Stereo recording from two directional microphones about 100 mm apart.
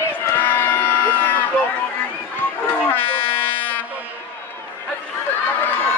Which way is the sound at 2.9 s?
20° left (ahead or behind).